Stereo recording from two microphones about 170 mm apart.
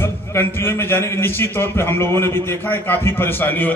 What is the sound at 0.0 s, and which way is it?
A man's voice, 15° left (ahead or behind).